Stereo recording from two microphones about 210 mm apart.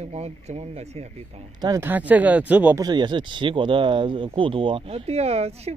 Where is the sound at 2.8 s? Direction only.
20° right (ahead or behind).